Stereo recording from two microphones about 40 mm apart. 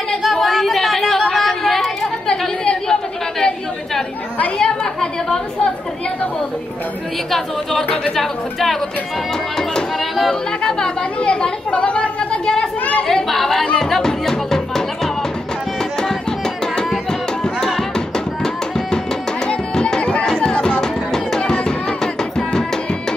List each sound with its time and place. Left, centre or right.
0.2 s chatter: centre
2.6 s chatter: left
3.3 s chatter: centre
4.6 s a woman's voice: centre
7.2 s a woman's voice: centre
10.6 s a woman's voice: centre
11.7 s a sound: left
13.1 s chatter: centre
13.7 s music: centre
17.9 s music: centre
20.0 s chatter: left
20.8 s music: centre